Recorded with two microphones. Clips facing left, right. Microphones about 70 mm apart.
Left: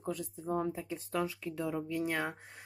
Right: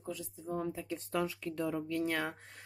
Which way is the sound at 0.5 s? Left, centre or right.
Left.